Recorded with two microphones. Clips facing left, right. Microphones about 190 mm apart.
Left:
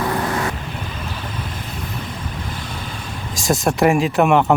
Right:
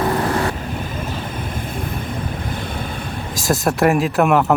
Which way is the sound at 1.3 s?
50° right (ahead or behind).